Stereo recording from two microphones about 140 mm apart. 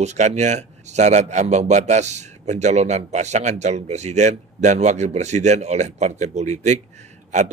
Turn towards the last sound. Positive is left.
turn(degrees=-60)  # may be behind; listen again after turning